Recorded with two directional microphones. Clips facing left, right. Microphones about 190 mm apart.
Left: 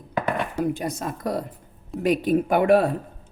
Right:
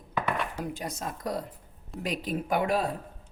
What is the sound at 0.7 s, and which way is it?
Speech, 65° left (ahead or behind).